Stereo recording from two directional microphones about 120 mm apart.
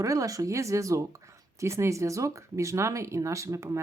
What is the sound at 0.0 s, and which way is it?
Speech, 30° right (ahead or behind).